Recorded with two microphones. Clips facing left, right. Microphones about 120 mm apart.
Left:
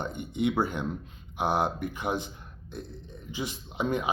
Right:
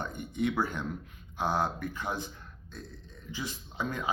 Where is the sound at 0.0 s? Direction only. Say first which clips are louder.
Left 3 dB; 20° left (ahead or behind).